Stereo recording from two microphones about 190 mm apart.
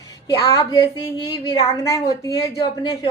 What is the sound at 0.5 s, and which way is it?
A woman's voice, 20° left (ahead or behind).